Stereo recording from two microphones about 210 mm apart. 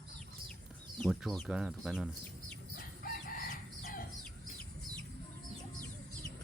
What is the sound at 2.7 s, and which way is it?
Chicken, 40° left (ahead or behind).